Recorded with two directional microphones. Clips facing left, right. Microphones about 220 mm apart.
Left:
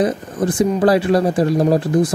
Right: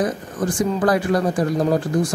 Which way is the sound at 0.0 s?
20° left (ahead or behind).